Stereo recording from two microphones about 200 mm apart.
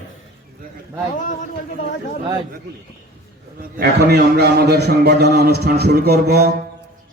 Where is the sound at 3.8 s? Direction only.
50° right (ahead or behind).